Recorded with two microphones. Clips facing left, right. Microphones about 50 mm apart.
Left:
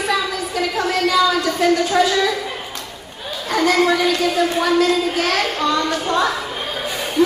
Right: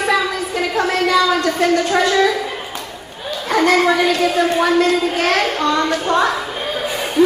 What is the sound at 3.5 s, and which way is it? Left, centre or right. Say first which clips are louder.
A child's voice: right 2 dB; centre.